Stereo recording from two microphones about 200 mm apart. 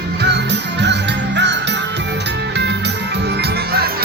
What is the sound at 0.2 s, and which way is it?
Music, 55° right (ahead or behind).